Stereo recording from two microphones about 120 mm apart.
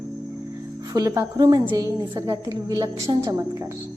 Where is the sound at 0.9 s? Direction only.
30° right (ahead or behind).